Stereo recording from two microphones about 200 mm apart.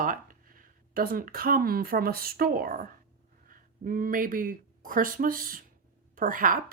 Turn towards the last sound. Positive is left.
turn(degrees=-40)  # may be behind; listen again after turning